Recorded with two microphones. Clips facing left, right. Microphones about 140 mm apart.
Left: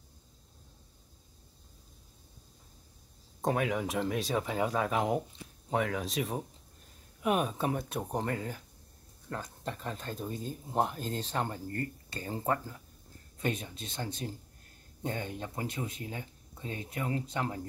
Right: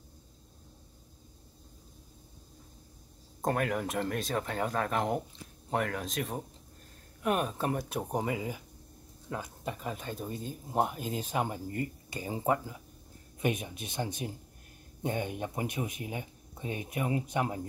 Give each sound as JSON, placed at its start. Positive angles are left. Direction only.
{"t": 3.4, "sound": "speech", "side_deg": 0}